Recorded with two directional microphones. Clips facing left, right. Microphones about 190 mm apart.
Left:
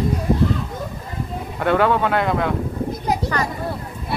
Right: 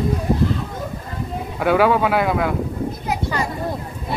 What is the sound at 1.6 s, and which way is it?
Speech, 5° right (ahead or behind).